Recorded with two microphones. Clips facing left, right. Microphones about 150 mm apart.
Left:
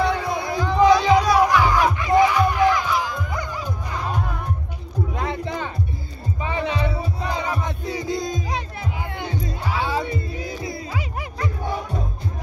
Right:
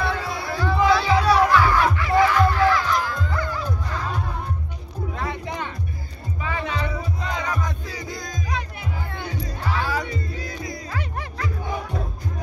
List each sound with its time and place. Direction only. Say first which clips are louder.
0.0 s music: left 4 dB; 20° left (ahead or behind)
2.0 s crowd: left 1 dB; 20° left (ahead or behind)
2.9 s music: even; 15° left (ahead or behind)
5.1 s heart sounds: left 1 dB; 25° left (ahead or behind)
6.4 s music: left 3 dB; 20° left (ahead or behind)
10.9 s music: left 1 dB; 10° left (ahead or behind)